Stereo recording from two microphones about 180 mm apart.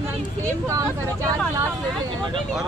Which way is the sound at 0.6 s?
20° right (ahead or behind).